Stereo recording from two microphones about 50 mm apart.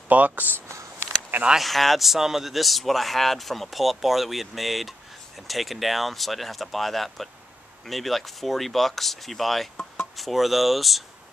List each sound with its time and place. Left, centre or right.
0.1 s speech: right
1.6 s speech: centre